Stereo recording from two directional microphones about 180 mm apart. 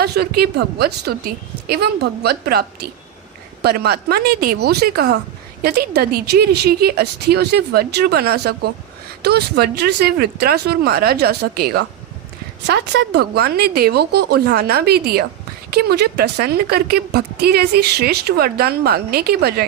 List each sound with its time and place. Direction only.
0.0 s a woman's voice: 60° right (ahead or behind)